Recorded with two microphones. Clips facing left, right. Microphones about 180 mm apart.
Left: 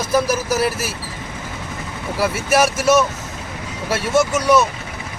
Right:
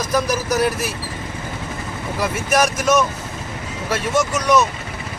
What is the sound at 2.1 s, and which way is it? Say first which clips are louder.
Speech: left 2 dB; 5° left (ahead or behind).